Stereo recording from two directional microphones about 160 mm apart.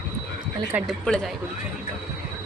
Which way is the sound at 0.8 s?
5° left (ahead or behind).